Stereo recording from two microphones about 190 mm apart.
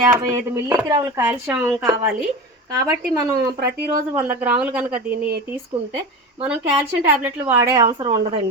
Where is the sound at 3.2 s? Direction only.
20° right (ahead or behind).